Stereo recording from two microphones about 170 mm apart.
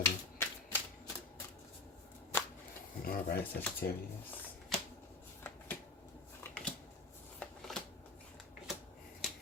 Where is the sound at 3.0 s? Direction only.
55° left (ahead or behind).